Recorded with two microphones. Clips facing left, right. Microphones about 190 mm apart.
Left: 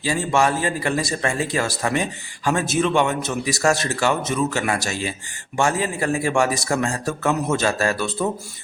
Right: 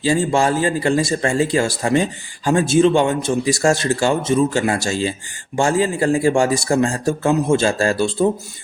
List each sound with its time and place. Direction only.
0.0 s speech: 30° right (ahead or behind)